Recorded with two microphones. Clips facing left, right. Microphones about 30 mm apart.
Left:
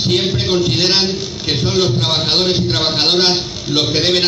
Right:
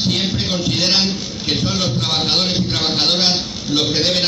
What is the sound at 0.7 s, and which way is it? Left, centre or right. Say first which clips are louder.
Speech: left 2 dB; left.